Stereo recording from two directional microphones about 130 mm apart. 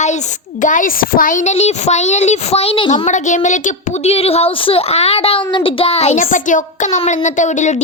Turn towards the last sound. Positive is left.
turn(degrees=70)  # may be behind; listen again after turning